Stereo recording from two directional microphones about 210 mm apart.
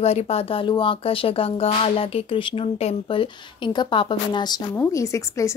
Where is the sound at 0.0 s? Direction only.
30° left (ahead or behind).